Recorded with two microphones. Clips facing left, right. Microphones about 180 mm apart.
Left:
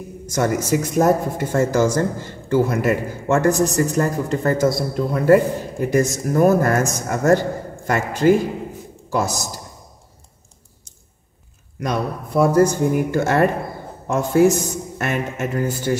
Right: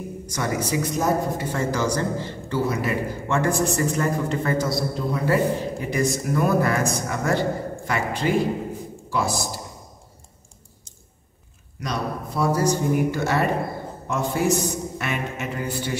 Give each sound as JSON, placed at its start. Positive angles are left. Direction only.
{"t": 0.3, "sound": "speech", "side_deg": 45}
{"t": 11.8, "sound": "speech", "side_deg": 55}